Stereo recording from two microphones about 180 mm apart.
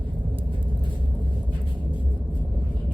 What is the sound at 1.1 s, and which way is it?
Vehicle, 10° right (ahead or behind).